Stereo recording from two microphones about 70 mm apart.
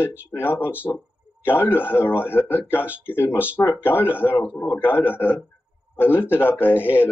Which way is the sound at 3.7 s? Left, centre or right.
Left.